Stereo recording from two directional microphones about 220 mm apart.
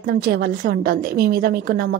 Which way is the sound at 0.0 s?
45° right (ahead or behind).